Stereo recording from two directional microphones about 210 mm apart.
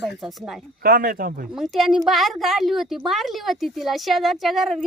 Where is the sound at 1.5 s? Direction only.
Centre (ahead or behind).